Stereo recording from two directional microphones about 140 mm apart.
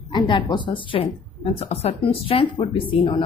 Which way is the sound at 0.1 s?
35° left (ahead or behind).